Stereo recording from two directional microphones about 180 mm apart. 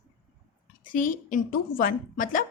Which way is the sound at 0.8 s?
45° left (ahead or behind).